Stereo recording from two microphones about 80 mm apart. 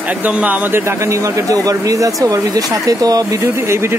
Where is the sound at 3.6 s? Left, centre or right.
Right.